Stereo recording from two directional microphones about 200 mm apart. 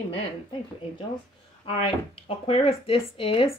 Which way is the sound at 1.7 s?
30° left (ahead or behind).